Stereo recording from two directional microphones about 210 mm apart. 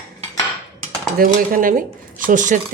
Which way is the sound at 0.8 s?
45° right (ahead or behind).